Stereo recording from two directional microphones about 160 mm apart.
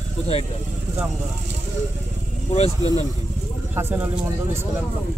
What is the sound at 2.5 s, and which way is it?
Speech, 40° left (ahead or behind).